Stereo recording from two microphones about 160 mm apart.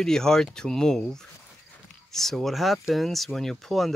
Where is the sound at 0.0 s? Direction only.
5° left (ahead or behind).